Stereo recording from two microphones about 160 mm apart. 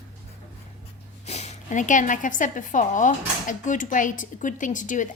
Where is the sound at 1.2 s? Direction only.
45° left (ahead or behind).